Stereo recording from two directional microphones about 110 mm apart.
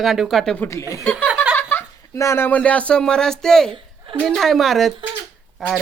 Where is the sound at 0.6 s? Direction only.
25° left (ahead or behind).